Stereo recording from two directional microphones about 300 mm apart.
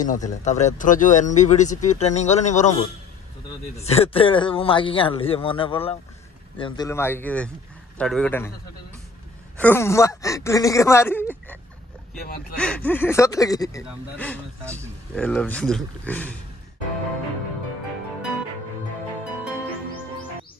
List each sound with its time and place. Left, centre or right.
0.0 s a man's voice: left; by 8.5 s centre
9.6 s a man's voice: centre
12.5 s a man's voice: centre
14.6 s speech: centre
15.1 s speech: centre